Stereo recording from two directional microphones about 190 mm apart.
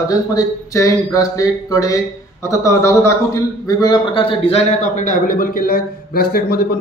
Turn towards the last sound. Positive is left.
turn(degrees=55)  # may be behind; listen again after turning